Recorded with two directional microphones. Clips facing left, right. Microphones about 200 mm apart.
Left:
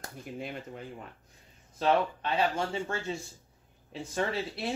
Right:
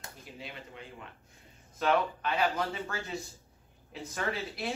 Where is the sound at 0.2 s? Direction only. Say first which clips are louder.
Left 8 dB; 50° left (ahead or behind).